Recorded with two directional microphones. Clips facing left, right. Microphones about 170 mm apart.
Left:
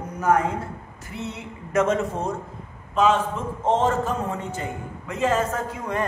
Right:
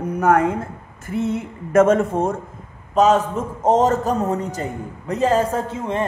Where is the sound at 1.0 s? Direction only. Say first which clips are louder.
Right 11 dB; 50° right (ahead or behind).